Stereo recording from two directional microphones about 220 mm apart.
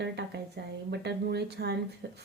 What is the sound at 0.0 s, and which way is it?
Speech, 50° right (ahead or behind).